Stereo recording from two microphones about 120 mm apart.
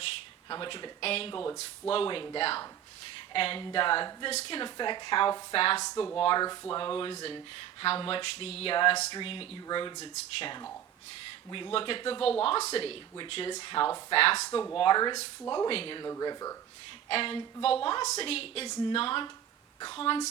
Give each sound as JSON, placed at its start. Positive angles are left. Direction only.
{"t": 0.4, "sound": "a woman's voice", "side_deg": 40}
{"t": 4.3, "sound": "a woman's voice", "side_deg": 55}
{"t": 5.8, "sound": "speech", "side_deg": 30}
{"t": 6.1, "sound": "a woman's voice", "side_deg": 40}
{"t": 9.6, "sound": "speech", "side_deg": 35}
{"t": 10.0, "sound": "a woman's voice", "side_deg": 55}
{"t": 11.5, "sound": "a woman's voice", "side_deg": 45}
{"t": 12.4, "sound": "a woman's voice", "side_deg": 55}
{"t": 14.8, "sound": "speech", "side_deg": 40}
{"t": 15.7, "sound": "a woman's voice", "side_deg": 45}
{"t": 16.0, "sound": "speech", "side_deg": 30}
{"t": 17.1, "sound": "a woman's voice", "side_deg": 50}
{"t": 18.7, "sound": "speech", "side_deg": 35}
{"t": 18.9, "sound": "a woman's voice", "side_deg": 45}